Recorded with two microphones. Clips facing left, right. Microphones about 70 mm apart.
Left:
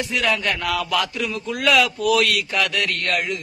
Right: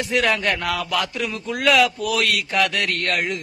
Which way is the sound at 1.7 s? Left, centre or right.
Centre.